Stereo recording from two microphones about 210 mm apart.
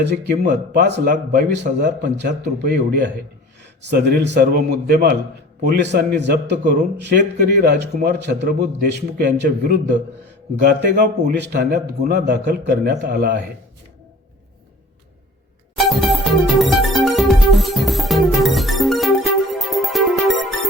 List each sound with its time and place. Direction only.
0.0 s a man's voice: 55° right (ahead or behind)
15.8 s music: centre (ahead or behind)